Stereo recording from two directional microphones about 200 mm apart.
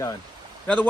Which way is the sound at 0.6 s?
5° left (ahead or behind).